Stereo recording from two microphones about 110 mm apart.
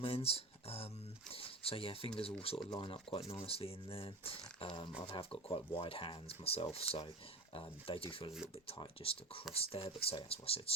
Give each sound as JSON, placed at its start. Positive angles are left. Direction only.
{"t": 0.0, "sound": "speech", "side_deg": 60}